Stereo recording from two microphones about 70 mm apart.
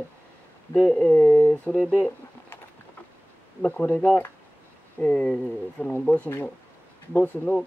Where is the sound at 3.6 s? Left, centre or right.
Left.